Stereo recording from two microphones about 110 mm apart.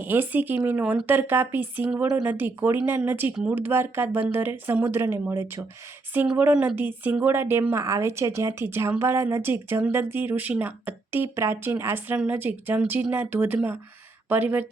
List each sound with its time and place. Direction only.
0.0 s a woman's voice: 15° right (ahead or behind)